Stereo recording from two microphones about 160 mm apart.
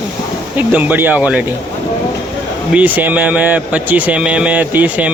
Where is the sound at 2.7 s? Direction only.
10° right (ahead or behind).